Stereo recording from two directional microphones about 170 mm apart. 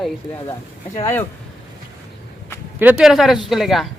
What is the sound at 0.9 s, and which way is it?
Speech, 15° left (ahead or behind).